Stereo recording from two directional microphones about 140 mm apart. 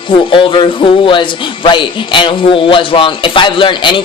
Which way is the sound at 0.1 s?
35° left (ahead or behind).